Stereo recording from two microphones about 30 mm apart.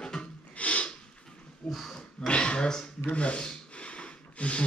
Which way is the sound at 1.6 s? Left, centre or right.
Centre.